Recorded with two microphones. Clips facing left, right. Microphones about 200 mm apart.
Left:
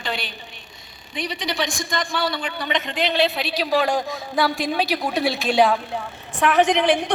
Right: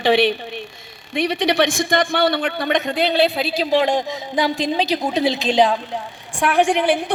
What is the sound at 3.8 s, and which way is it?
A man's voice, 20° right (ahead or behind).